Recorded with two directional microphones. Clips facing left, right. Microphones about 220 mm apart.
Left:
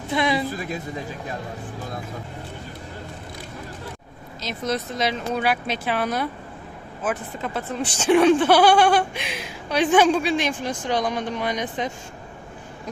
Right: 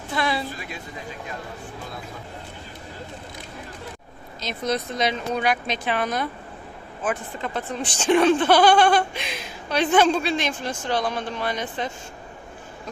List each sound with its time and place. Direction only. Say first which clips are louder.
0.1 s a woman's voice: left 3 dB; 20° left (ahead or behind)
4.4 s speech: even; centre (ahead or behind)